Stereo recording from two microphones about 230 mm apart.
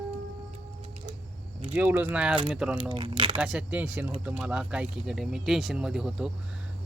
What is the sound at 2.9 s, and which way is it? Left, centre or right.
Speech, right.